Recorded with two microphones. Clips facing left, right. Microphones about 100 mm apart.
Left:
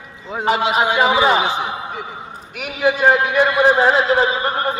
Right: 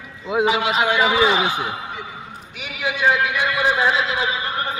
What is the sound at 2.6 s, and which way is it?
A man's voice, 45° left (ahead or behind).